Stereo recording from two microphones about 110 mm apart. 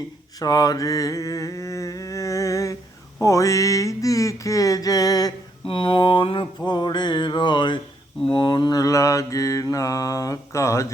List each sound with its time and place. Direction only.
0.3 s mantra: 35° left (ahead or behind)
5.6 s mantra: 50° left (ahead or behind); by 10.9 s 25° left (ahead or behind)